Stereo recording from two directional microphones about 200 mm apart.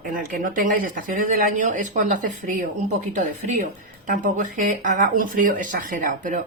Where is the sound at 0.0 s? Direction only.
40° right (ahead or behind).